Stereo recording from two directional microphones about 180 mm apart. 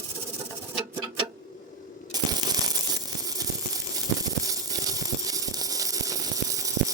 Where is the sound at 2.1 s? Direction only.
20° right (ahead or behind).